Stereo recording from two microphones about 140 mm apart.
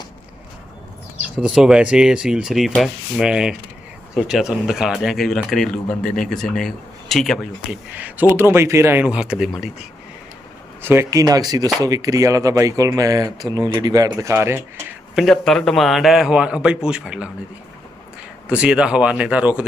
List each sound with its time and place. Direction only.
1.4 s speech: 5° right (ahead or behind)
7.9 s speech: 10° right (ahead or behind)
10.8 s speech: 20° right (ahead or behind)
15.1 s speech: centre (ahead or behind)
18.4 s speech: 5° right (ahead or behind)